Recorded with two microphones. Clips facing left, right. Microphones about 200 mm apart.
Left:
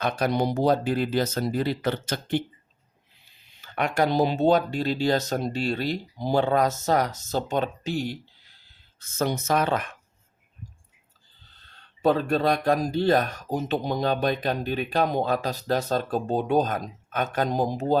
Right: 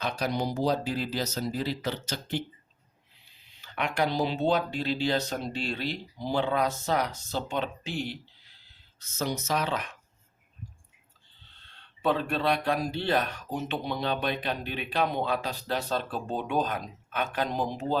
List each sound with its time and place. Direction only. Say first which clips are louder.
0.0 s speech: left 5 dB; 60° left (ahead or behind)
3.6 s speech: left 4 dB; 45° left (ahead or behind)
11.6 s speech: left 6 dB; 40° left (ahead or behind)